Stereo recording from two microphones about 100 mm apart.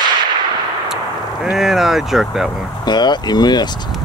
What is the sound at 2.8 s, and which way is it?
Speech, 45° left (ahead or behind).